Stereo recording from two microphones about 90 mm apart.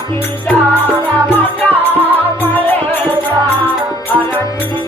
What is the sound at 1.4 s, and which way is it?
Music, 20° left (ahead or behind).